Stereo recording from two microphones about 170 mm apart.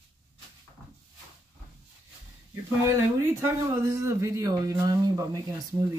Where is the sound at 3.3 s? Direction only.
15° right (ahead or behind).